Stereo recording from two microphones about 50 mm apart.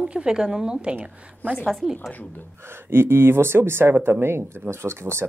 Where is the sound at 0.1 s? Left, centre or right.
Centre.